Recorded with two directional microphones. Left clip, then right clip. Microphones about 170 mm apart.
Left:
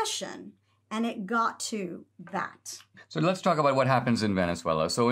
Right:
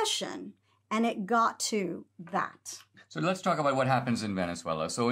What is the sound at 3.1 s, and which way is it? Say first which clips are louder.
Speech: left 3 dB; 40° left (ahead or behind).